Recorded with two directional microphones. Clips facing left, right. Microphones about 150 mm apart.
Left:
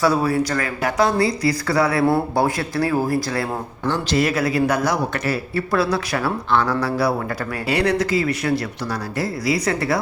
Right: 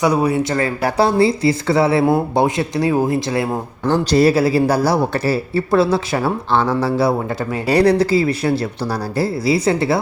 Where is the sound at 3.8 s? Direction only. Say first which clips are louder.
Right 6 dB; 40° right (ahead or behind).